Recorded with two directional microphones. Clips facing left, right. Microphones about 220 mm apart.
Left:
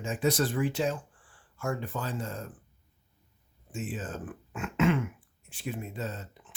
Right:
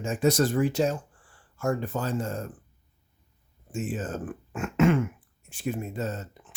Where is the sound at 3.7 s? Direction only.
45° right (ahead or behind).